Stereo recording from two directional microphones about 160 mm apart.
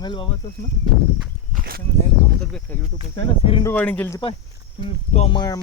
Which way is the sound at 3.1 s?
35° left (ahead or behind).